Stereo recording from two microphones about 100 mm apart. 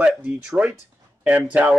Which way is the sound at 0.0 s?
10° right (ahead or behind).